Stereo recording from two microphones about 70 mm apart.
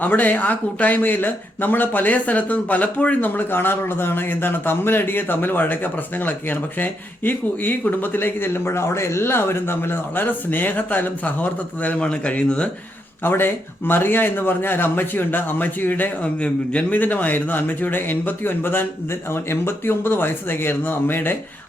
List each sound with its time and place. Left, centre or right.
0.0 s speech: left
13.2 s speech: left